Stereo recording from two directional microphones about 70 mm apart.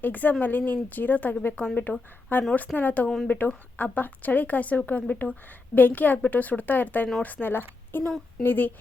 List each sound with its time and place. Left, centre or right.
0.0 s a woman's voice: left